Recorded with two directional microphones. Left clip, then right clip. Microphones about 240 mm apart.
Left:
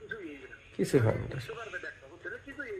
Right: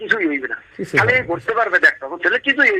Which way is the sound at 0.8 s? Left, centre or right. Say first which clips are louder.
Right 4 dB; centre.